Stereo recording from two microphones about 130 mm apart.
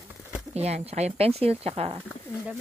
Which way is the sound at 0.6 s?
55° right (ahead or behind).